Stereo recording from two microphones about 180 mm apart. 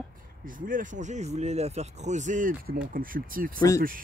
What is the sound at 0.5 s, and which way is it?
Speech, 50° right (ahead or behind).